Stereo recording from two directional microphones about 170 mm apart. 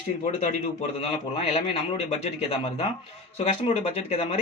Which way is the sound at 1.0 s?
35° left (ahead or behind).